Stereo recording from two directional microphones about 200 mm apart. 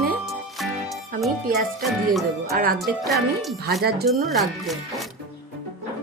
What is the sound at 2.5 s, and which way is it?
Speech, 50° right (ahead or behind).